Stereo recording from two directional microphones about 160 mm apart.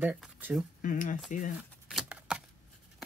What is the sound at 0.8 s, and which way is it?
Speech, 55° left (ahead or behind).